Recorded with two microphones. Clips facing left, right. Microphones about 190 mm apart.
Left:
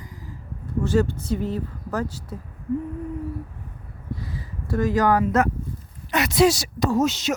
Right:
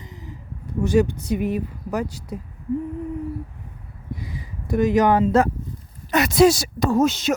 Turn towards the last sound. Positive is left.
turn(degrees=-55)  # may be behind; listen again after turning